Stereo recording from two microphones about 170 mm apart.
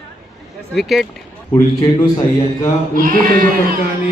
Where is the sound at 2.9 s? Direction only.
55° right (ahead or behind).